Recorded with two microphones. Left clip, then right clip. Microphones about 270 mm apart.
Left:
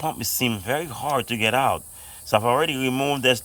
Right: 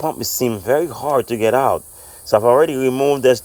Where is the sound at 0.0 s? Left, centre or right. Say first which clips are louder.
Right 5 dB; centre.